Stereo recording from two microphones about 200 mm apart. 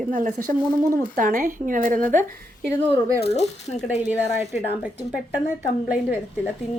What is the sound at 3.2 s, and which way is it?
Speech, 30° left (ahead or behind).